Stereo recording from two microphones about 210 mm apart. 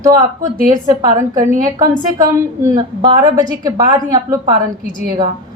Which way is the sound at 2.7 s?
20° right (ahead or behind).